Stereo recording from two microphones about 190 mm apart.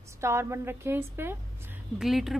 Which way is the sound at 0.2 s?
15° right (ahead or behind).